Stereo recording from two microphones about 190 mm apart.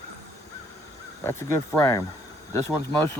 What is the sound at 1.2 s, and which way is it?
Speech, 15° left (ahead or behind).